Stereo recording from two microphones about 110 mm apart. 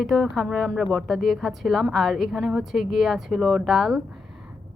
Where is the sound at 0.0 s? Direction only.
Centre (ahead or behind).